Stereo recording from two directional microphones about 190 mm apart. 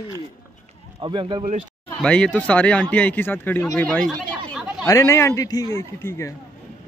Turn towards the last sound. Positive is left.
turn(degrees=15)  # may be behind; listen again after turning